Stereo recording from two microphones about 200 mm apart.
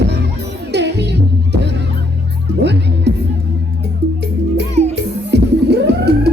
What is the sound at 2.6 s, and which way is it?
Music, 55° right (ahead or behind).